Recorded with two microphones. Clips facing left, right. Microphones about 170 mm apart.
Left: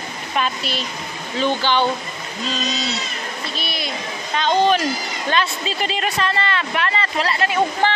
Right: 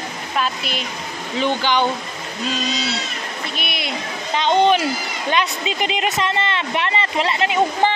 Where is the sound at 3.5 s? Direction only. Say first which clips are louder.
Right 1 dB; 20° right (ahead or behind).